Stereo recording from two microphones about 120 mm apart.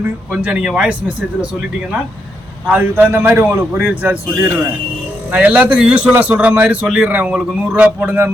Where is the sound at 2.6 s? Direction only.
15° right (ahead or behind).